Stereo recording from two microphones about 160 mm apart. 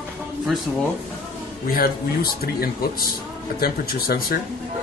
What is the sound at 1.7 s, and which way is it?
Speech, 70° left (ahead or behind).